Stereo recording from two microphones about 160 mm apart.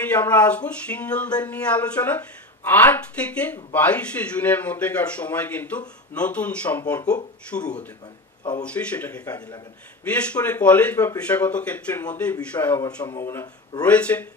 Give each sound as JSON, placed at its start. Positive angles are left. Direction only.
{"t": 0.0, "sound": "speech", "side_deg": 10}
{"t": 7.5, "sound": "speech", "side_deg": 50}
{"t": 8.6, "sound": "speech", "side_deg": 10}
{"t": 9.2, "sound": "a man's voice", "side_deg": 20}
{"t": 10.0, "sound": "speech", "side_deg": 10}